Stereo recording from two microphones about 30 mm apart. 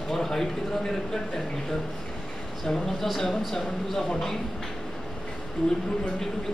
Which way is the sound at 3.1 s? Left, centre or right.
Centre.